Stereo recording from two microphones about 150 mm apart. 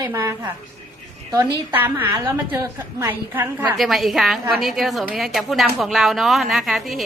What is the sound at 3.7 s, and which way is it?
A woman's voice, centre (ahead or behind).